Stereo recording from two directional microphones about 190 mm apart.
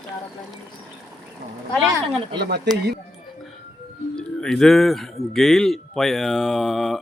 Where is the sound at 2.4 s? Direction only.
55° right (ahead or behind).